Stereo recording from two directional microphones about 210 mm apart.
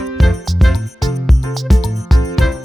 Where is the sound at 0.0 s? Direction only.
Centre (ahead or behind).